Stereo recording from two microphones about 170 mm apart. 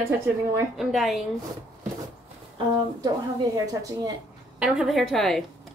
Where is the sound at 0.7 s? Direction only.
Centre (ahead or behind).